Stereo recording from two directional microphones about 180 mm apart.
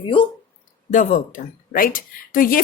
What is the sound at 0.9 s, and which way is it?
A woman's voice, 45° left (ahead or behind).